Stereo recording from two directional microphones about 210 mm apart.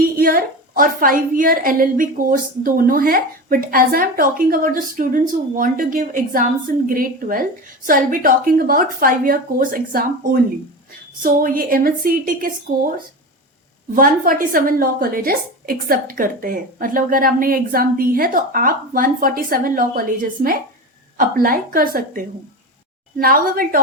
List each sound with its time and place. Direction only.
0.0 s a woman's voice: 45° right (ahead or behind)
11.2 s a woman's voice: 45° right (ahead or behind)
13.9 s a woman's voice: 40° right (ahead or behind)
23.2 s a woman's voice: 45° right (ahead or behind)